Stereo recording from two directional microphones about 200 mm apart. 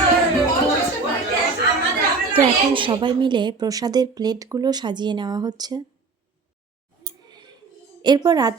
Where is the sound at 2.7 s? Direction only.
25° right (ahead or behind).